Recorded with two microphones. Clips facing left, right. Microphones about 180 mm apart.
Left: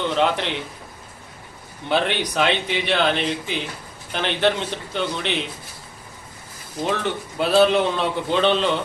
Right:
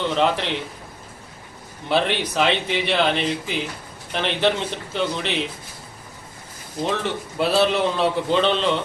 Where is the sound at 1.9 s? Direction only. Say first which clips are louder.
Even; centre (ahead or behind).